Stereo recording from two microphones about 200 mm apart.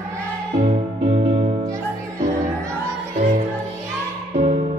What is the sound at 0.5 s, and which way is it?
Music, 35° right (ahead or behind).